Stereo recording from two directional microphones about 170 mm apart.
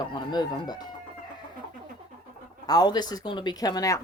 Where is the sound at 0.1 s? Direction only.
25° left (ahead or behind).